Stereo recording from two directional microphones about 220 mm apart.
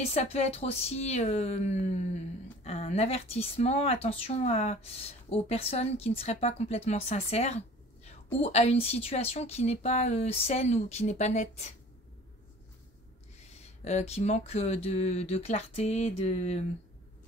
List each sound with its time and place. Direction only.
0.0 s speech: 30° left (ahead or behind)
13.6 s speech: 30° left (ahead or behind)